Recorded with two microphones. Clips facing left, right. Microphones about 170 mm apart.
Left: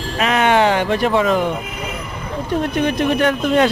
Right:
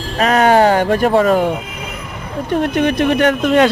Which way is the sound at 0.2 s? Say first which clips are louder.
Right 4 dB; 40° right (ahead or behind).